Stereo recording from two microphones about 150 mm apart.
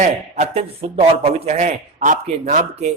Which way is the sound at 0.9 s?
40° right (ahead or behind).